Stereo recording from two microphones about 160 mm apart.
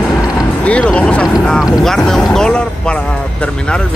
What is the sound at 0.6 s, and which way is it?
Speech, 10° left (ahead or behind).